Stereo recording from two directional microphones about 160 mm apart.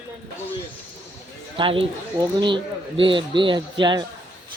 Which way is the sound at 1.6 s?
30° right (ahead or behind).